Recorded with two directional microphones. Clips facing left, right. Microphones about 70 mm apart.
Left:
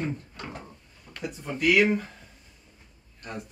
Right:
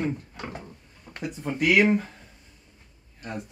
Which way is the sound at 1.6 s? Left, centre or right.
Centre.